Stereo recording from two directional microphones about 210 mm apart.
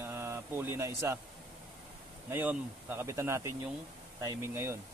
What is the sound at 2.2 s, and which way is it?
Speech, 10° right (ahead or behind).